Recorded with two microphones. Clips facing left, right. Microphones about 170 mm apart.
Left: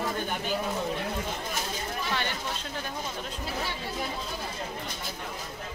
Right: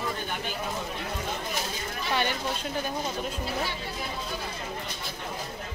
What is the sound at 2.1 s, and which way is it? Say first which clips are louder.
Speech: right 6 dB; 15° right (ahead or behind).